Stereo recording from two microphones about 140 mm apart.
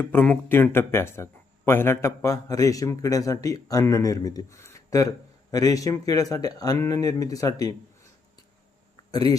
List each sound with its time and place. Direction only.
0.0 s speech: 10° left (ahead or behind)